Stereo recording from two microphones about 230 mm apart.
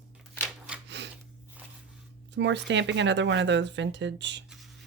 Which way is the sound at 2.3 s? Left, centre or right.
Right.